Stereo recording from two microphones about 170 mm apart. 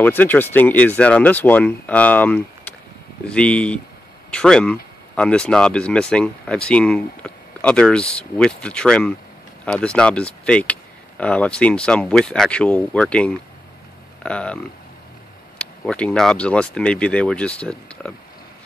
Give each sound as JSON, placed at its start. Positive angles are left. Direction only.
{"t": 0.0, "sound": "speech", "side_deg": 10}